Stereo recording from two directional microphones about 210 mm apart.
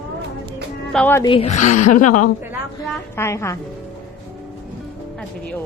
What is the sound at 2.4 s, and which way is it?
Speech, 10° right (ahead or behind).